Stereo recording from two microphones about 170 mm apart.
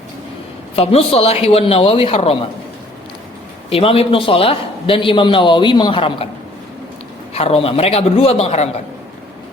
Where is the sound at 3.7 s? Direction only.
35° left (ahead or behind).